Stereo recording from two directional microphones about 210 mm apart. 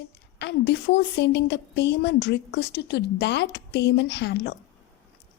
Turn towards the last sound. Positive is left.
turn(degrees=55)  # may be behind; listen again after turning